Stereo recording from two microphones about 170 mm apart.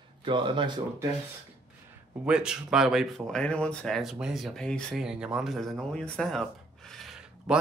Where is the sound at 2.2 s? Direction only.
5° right (ahead or behind).